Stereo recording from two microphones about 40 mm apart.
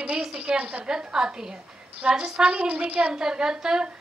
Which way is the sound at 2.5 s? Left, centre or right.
Right.